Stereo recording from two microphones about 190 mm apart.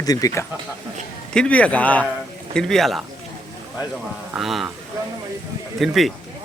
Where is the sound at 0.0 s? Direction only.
20° left (ahead or behind).